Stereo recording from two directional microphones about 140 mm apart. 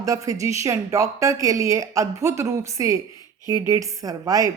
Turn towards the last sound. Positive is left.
turn(degrees=-25)  # may be behind; listen again after turning